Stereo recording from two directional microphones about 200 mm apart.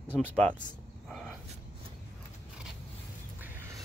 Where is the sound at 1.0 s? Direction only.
Centre (ahead or behind).